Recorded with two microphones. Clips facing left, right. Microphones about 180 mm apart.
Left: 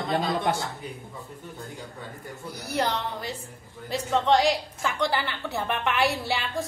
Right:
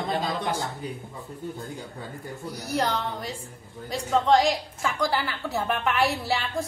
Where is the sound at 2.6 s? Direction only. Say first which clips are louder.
Right 1 dB; centre (ahead or behind).